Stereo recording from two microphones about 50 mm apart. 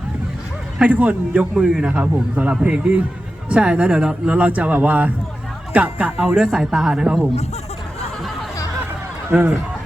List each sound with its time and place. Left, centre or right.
0.8 s a man's voice: right
1.5 s a man's voice: centre
4.3 s a man's voice: right
6.1 s speech: centre
8.8 s a sound: right